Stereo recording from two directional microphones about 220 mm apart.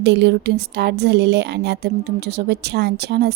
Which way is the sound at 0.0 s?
50° right (ahead or behind).